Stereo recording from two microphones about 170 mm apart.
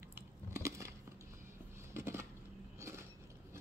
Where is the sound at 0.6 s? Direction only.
15° right (ahead or behind).